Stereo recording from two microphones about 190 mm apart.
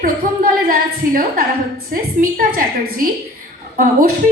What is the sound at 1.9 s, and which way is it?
A woman's voice, 45° right (ahead or behind).